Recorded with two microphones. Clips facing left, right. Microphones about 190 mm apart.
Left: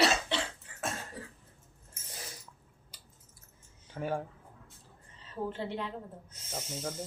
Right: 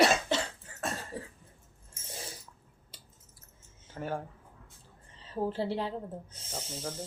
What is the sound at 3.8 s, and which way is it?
Speech, centre (ahead or behind).